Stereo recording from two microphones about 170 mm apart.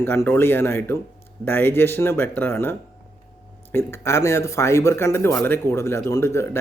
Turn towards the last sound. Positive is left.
turn(degrees=15)  # may be behind; listen again after turning